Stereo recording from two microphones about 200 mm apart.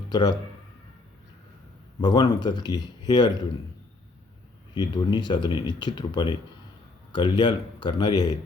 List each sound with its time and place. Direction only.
0.1 s speech: 20° left (ahead or behind)
2.0 s speech: 20° left (ahead or behind)
4.7 s speech: 20° left (ahead or behind)